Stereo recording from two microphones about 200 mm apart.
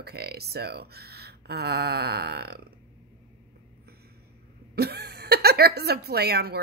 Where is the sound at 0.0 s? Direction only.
55° right (ahead or behind).